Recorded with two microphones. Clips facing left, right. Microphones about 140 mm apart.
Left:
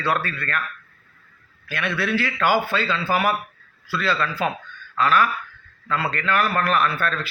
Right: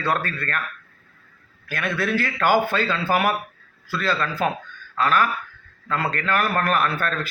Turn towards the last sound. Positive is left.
turn(degrees=-45)  # may be behind; listen again after turning